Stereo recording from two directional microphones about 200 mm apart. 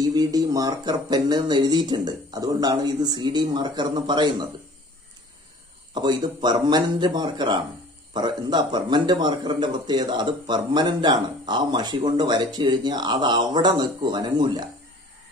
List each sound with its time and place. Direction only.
0.0 s a man's voice: 20° right (ahead or behind)
5.9 s a man's voice: 20° right (ahead or behind)